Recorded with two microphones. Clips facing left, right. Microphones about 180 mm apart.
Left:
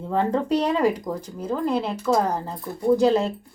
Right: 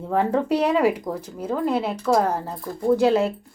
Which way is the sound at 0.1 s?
10° right (ahead or behind).